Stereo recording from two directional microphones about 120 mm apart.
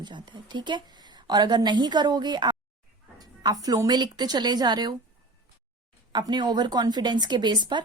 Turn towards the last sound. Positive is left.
turn(degrees=-40)  # may be behind; listen again after turning